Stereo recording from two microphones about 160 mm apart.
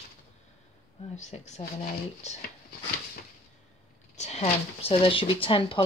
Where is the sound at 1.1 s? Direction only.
45° left (ahead or behind).